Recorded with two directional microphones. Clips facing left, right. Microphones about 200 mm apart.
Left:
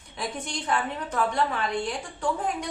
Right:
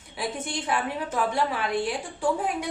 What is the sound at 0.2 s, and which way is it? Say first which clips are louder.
A woman's voice: right 2 dB; 5° right (ahead or behind).